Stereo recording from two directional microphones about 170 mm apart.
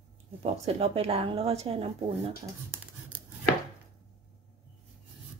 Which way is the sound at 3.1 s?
10° right (ahead or behind).